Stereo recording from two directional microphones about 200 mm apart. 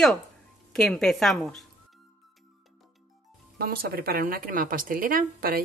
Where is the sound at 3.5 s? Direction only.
50° right (ahead or behind).